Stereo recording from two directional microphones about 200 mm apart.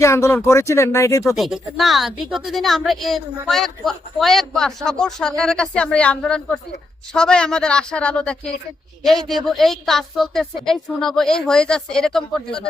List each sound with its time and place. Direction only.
0.0 s speech: 15° left (ahead or behind)
1.4 s a woman's voice: centre (ahead or behind)